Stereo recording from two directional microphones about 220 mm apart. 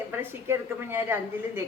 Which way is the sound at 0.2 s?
10° right (ahead or behind).